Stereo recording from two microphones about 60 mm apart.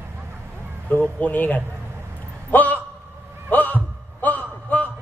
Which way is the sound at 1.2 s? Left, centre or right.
Left.